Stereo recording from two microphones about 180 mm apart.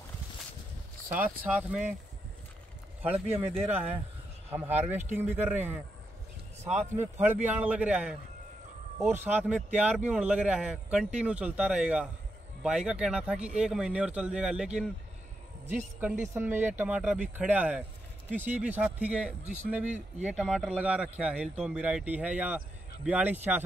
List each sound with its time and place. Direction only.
1.0 s a man's voice: 10° right (ahead or behind)
3.3 s speech: 35° right (ahead or behind)
4.5 s a man's voice: 10° right (ahead or behind)
7.2 s a man's voice: 10° right (ahead or behind)
16.0 s a man's voice: 10° right (ahead or behind)
19.9 s speech: 40° right (ahead or behind)
20.3 s a man's voice: 5° right (ahead or behind)